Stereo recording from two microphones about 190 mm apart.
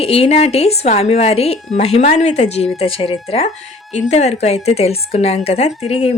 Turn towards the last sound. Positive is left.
turn(degrees=30)  # may be behind; listen again after turning